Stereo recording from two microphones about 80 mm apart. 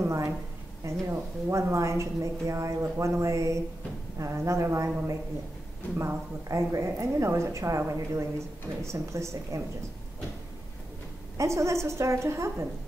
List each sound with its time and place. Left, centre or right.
0.0 s a sound: right
0.8 s a woman's voice: right
11.3 s a woman's voice: right